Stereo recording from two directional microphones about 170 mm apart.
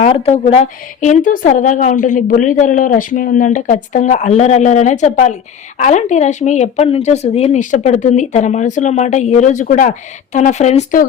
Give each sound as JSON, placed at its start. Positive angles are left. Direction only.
{"t": 0.0, "sound": "speech", "side_deg": 40}
{"t": 1.0, "sound": "a woman's voice", "side_deg": 50}